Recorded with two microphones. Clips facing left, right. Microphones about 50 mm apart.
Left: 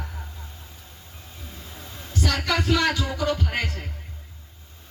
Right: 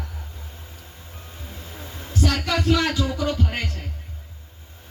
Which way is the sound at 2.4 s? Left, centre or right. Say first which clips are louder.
Left 1 dB; centre.